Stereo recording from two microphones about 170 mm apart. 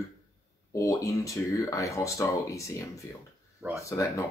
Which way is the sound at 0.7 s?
20° left (ahead or behind).